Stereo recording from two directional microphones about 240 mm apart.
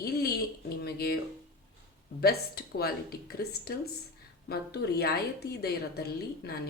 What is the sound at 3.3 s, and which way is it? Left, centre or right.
Speech, left.